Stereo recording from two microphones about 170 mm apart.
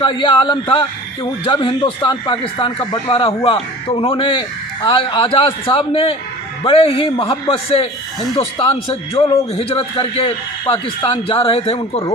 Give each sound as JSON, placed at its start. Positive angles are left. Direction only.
{"t": 0.0, "sound": "a man's voice", "side_deg": 30}